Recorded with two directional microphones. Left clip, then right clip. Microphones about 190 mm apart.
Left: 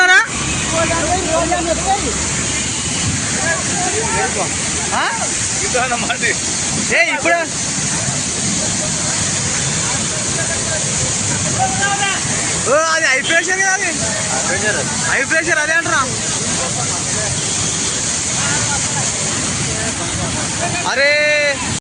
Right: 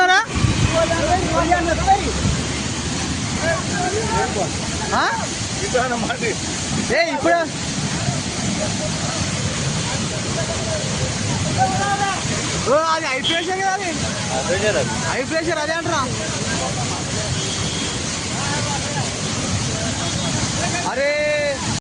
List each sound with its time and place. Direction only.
0.0 s a sound: 15° right (ahead or behind)
6.9 s speech: 25° right (ahead or behind)
12.7 s speech: 5° right (ahead or behind)
15.1 s speech: 10° right (ahead or behind)
21.0 s speech: centre (ahead or behind)